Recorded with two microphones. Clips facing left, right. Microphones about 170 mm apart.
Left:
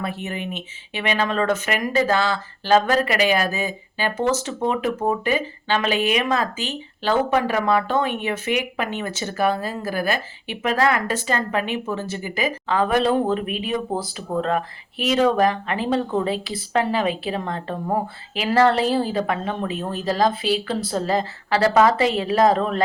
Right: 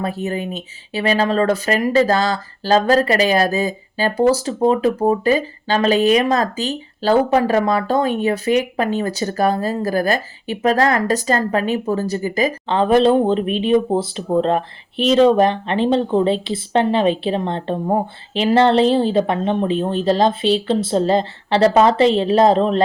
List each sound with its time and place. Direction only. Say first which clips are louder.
0.0 s speech: right 6 dB; 35° right (ahead or behind)
12.6 s speech: right 6 dB; 25° right (ahead or behind)